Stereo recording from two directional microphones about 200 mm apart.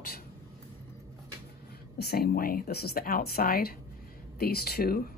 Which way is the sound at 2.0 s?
50° left (ahead or behind).